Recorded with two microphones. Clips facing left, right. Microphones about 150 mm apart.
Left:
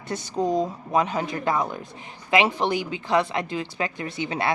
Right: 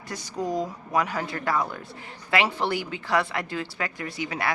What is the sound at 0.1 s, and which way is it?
A woman's voice, 25° left (ahead or behind).